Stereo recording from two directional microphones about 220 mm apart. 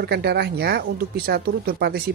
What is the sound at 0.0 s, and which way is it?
Speech, 45° right (ahead or behind).